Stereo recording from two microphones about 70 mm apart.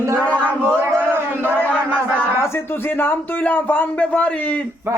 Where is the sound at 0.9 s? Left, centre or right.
Right.